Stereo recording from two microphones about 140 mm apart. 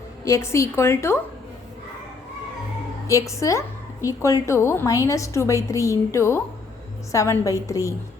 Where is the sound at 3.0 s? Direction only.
20° left (ahead or behind).